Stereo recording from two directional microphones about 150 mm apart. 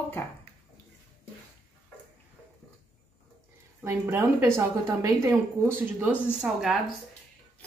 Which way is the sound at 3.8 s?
15° right (ahead or behind).